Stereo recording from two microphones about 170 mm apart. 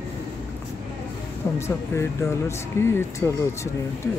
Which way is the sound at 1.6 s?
15° left (ahead or behind).